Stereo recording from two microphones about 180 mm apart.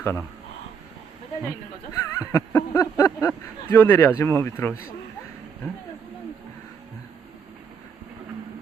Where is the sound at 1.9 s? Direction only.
20° left (ahead or behind).